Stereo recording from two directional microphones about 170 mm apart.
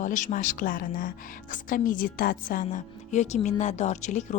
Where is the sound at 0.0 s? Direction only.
50° left (ahead or behind).